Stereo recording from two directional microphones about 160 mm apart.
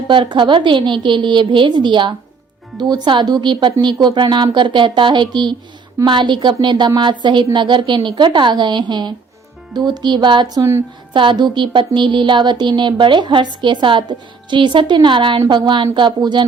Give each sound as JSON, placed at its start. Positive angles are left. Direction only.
{"t": 0.1, "sound": "a woman's voice", "side_deg": -30}
{"t": 11.1, "sound": "a woman's voice", "side_deg": -30}